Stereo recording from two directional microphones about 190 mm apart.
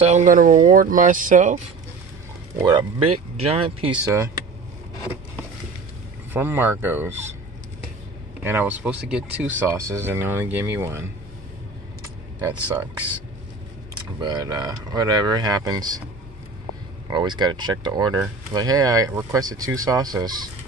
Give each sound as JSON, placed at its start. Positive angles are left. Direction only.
{"t": 0.0, "sound": "speech", "side_deg": -40}
{"t": 2.6, "sound": "speech", "side_deg": -20}
{"t": 6.3, "sound": "speech", "side_deg": -10}
{"t": 8.5, "sound": "speech", "side_deg": -10}
{"t": 12.0, "sound": "a sound", "side_deg": -20}
{"t": 14.2, "sound": "speech", "side_deg": -20}
{"t": 17.1, "sound": "speech", "side_deg": -25}